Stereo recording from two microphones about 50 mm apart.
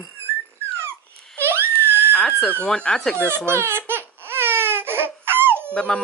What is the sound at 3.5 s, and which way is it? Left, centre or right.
Baby cry, right.